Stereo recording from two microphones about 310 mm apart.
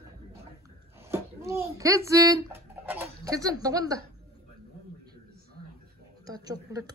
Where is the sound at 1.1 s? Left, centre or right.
Centre.